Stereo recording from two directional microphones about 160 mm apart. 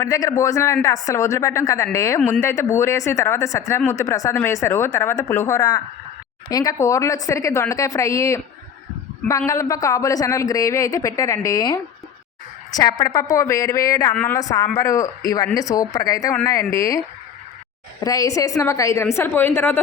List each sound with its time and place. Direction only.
0.0 s speech: 20° left (ahead or behind)
9.5 s speech: 20° left (ahead or behind)
14.1 s speech: 10° left (ahead or behind)
14.3 s speech: 20° left (ahead or behind)
18.0 s speech: 20° left (ahead or behind)